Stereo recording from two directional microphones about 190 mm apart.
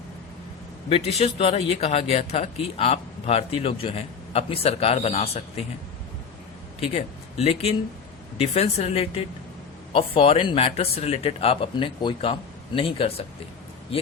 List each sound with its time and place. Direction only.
0.9 s speech: 30° left (ahead or behind)
6.9 s speech: 35° left (ahead or behind)